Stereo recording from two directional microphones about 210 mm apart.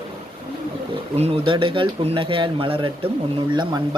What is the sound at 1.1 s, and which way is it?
Speech, 30° right (ahead or behind).